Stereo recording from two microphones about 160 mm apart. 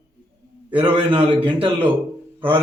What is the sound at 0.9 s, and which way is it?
Speech, 30° right (ahead or behind).